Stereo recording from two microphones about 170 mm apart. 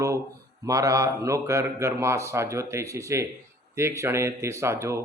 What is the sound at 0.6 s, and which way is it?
A man's voice, 20° right (ahead or behind).